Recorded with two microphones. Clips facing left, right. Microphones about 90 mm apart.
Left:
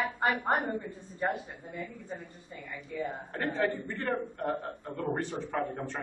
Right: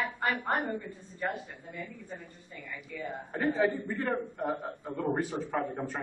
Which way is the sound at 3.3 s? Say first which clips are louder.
Right 3 dB; 5° right (ahead or behind).